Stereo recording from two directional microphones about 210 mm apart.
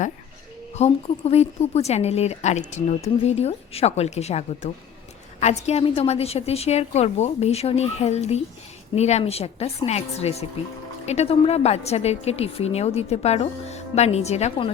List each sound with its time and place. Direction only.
0.8 s a woman's voice: 30° left (ahead or behind)